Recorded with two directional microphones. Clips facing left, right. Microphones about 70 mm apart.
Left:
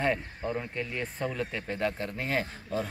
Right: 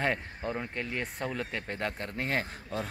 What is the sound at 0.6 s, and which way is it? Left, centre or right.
Speech, right.